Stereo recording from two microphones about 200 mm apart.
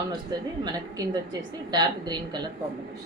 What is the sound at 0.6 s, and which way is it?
A woman's voice, 20° right (ahead or behind).